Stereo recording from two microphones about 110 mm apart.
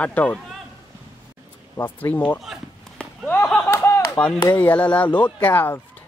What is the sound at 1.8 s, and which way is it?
Speech, 20° left (ahead or behind).